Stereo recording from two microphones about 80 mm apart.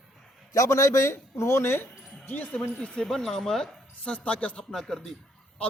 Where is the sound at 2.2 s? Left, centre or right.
Left.